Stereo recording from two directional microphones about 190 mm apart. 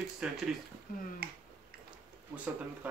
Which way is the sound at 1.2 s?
55° right (ahead or behind).